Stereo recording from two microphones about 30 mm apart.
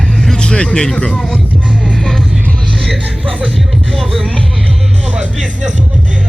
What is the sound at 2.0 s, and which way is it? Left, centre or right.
Music, left.